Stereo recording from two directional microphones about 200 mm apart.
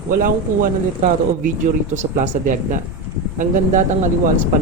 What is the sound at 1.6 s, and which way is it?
Speech, 35° right (ahead or behind).